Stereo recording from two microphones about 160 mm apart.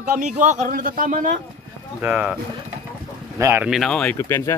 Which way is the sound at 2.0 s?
10° right (ahead or behind).